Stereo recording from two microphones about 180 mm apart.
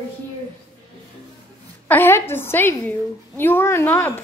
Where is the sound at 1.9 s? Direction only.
10° left (ahead or behind).